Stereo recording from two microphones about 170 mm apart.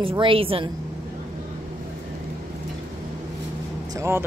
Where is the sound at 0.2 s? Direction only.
30° right (ahead or behind).